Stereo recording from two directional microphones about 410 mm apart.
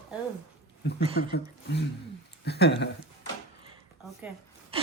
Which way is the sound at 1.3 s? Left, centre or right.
Left.